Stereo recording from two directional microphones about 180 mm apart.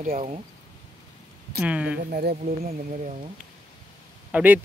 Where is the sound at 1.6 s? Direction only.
5° right (ahead or behind).